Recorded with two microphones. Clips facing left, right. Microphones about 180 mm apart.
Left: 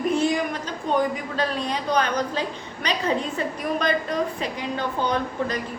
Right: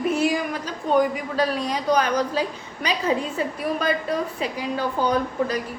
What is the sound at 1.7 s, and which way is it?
A woman's voice, 10° right (ahead or behind).